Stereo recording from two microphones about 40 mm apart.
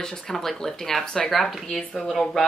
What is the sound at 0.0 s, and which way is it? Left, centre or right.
Speech, centre.